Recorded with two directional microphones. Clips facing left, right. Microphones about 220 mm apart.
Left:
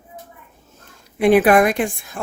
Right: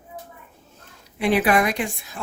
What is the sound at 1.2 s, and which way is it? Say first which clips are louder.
Speech: left 7 dB; 50° left (ahead or behind).